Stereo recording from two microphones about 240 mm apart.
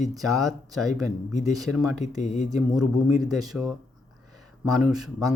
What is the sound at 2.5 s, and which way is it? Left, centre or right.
Speech, centre.